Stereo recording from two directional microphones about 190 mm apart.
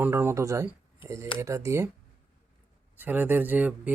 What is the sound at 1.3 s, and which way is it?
Speech, 15° right (ahead or behind).